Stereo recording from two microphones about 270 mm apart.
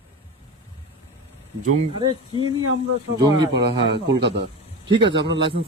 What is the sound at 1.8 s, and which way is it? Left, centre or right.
Speech, centre.